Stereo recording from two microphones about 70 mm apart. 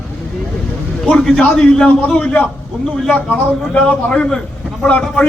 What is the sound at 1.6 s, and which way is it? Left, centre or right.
Speech, centre.